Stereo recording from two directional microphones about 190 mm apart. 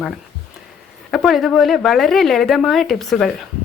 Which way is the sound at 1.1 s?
Centre (ahead or behind).